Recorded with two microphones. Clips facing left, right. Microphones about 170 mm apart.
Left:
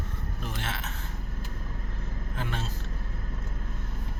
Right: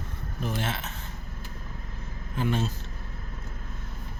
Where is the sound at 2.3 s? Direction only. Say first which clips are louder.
Right 8 dB; 15° right (ahead or behind).